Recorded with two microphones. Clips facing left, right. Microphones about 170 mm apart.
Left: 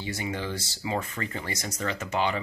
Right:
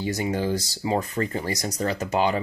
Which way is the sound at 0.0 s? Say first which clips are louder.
Right 7 dB; 40° right (ahead or behind).